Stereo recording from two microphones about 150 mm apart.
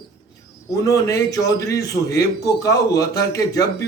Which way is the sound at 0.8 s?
20° left (ahead or behind).